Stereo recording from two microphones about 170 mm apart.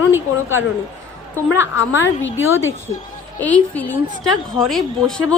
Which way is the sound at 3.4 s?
10° left (ahead or behind).